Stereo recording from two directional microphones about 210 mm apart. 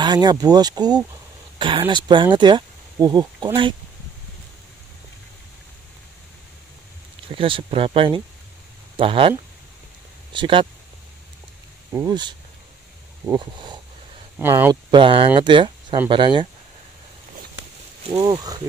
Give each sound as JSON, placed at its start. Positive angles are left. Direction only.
{"t": 0.0, "sound": "speech", "side_deg": -20}
{"t": 7.2, "sound": "speech", "side_deg": -25}
{"t": 10.3, "sound": "speech", "side_deg": -25}
{"t": 11.9, "sound": "speech", "side_deg": -15}
{"t": 18.1, "sound": "speech", "side_deg": -25}